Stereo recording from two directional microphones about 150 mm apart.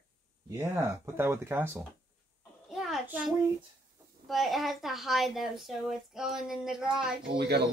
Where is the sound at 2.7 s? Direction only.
Centre (ahead or behind).